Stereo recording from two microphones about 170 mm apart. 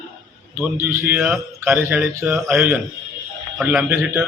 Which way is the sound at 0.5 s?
15° right (ahead or behind).